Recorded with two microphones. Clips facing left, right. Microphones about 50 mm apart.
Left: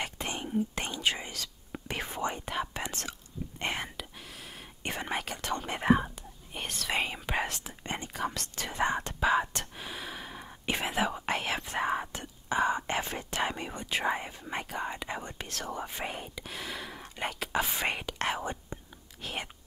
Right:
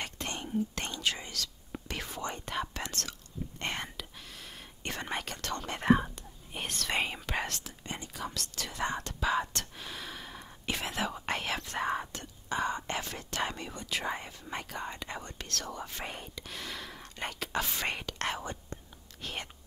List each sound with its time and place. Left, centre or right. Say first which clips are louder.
0.0 s whispering: left 3 dB; centre
2.3 s whispering: left 2 dB; centre
7.2 s speech: left 3 dB; centre
7.8 s whispering: left 6 dB; left; by 19.5 s centre